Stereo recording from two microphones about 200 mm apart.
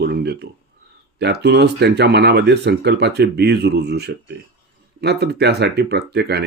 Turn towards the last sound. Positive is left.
turn(degrees=-55)  # may be behind; listen again after turning